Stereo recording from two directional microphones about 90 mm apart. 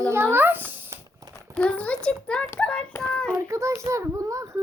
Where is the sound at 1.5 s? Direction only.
15° left (ahead or behind).